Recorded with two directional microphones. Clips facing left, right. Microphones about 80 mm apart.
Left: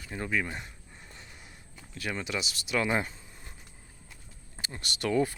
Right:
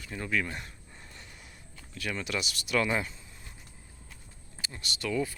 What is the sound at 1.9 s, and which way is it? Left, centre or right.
Speech, left.